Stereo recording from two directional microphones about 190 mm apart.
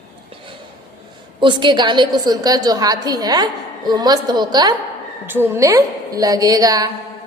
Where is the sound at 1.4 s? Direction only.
25° right (ahead or behind).